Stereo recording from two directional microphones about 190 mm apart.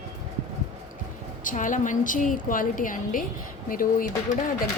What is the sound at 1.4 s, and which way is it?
A woman's voice, 45° left (ahead or behind).